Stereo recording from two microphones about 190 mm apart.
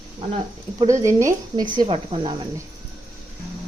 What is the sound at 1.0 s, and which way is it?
Speech, 15° right (ahead or behind).